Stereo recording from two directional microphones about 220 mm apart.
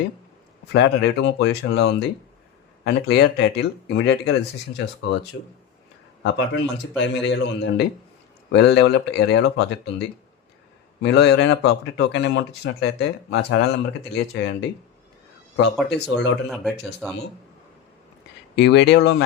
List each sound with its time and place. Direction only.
0.7 s speech: 55° left (ahead or behind)
11.0 s speech: 50° left (ahead or behind)
15.5 s speech: 50° left (ahead or behind)
18.5 s speech: 50° left (ahead or behind)